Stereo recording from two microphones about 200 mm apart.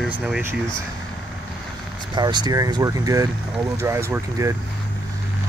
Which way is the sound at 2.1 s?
20° right (ahead or behind).